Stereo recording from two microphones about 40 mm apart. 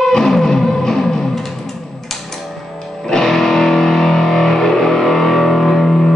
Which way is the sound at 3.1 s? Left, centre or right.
Centre.